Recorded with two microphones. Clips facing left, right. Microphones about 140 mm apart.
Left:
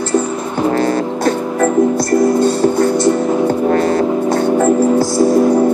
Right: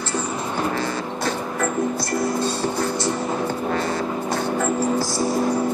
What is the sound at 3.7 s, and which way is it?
Music, 55° left (ahead or behind).